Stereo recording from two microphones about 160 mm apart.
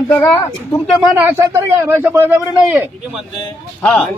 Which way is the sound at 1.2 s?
15° right (ahead or behind).